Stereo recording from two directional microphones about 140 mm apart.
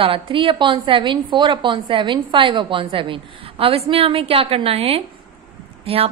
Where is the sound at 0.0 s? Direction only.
40° right (ahead or behind).